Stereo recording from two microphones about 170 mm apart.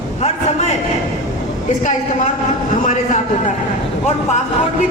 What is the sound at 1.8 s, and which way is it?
Speech, 45° left (ahead or behind).